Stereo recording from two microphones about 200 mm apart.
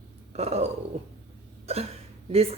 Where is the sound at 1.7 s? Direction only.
30° right (ahead or behind).